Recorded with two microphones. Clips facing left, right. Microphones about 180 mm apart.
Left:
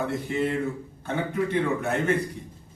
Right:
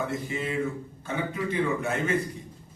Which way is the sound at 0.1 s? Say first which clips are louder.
Left 4 dB; 60° left (ahead or behind).